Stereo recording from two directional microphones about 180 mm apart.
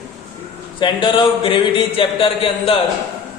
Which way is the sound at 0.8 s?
25° left (ahead or behind).